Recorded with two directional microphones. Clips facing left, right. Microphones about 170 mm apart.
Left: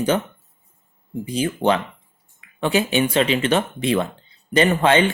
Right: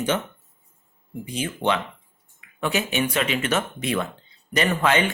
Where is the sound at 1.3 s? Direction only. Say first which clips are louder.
Left 5 dB; 35° left (ahead or behind).